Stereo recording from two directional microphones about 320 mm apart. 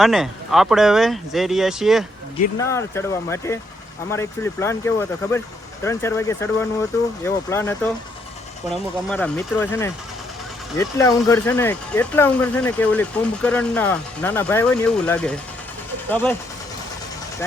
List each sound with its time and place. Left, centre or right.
0.0 s speech: centre